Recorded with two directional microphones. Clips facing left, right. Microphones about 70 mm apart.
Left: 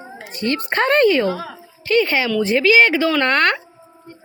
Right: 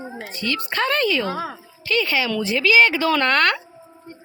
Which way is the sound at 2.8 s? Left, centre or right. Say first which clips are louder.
Left 2 dB; left.